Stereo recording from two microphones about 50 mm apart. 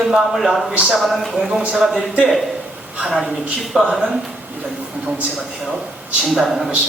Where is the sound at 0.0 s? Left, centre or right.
Centre.